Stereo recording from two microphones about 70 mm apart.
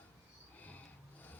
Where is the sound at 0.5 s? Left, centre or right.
Left.